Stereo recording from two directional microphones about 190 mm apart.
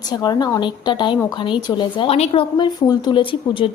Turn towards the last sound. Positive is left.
turn(degrees=25)  # may be behind; listen again after turning